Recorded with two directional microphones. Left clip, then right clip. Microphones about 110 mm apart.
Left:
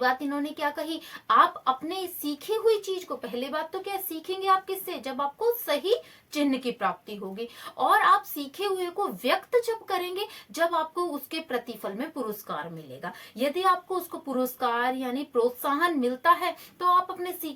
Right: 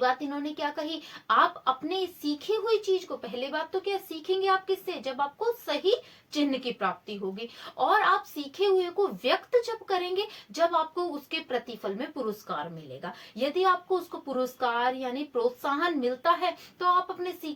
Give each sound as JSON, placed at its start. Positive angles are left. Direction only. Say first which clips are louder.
{"t": 0.0, "sound": "speech", "louder": "left 1 dB", "side_deg": 40}